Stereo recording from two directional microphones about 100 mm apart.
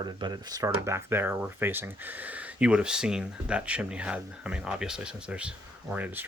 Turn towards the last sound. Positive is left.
turn(degrees=-15)  # may be behind; listen again after turning